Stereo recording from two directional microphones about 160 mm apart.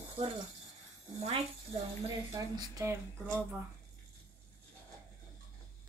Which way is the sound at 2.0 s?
25° right (ahead or behind).